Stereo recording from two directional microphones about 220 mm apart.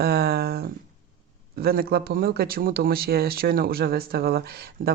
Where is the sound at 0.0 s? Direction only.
45° right (ahead or behind).